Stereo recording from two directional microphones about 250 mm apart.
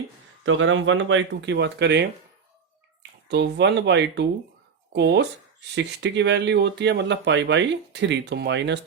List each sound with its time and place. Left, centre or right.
0.4 s speech: right
3.2 s speech: right